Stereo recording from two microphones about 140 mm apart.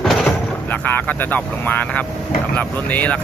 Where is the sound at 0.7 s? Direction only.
10° left (ahead or behind).